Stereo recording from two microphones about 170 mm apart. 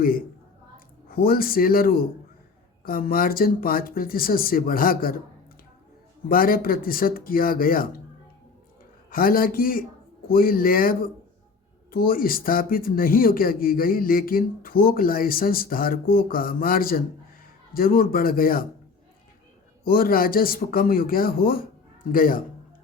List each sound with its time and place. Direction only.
1.1 s speech: 60° left (ahead or behind)
6.2 s speech: 55° left (ahead or behind)
9.0 s speech: 60° left (ahead or behind)
19.8 s speech: 60° left (ahead or behind)